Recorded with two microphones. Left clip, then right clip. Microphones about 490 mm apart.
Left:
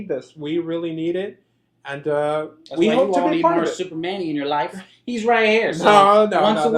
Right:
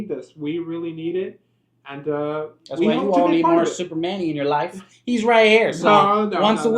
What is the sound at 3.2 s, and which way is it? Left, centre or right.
Speech, right.